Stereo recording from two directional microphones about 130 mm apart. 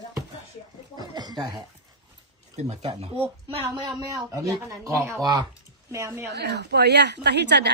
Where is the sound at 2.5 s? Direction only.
55° right (ahead or behind).